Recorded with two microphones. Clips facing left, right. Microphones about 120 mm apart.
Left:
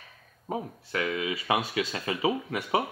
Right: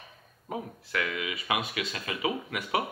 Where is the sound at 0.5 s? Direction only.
30° left (ahead or behind).